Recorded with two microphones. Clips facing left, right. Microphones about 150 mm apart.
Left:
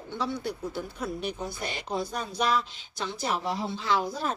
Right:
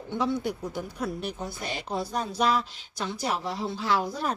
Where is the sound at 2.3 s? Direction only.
5° right (ahead or behind).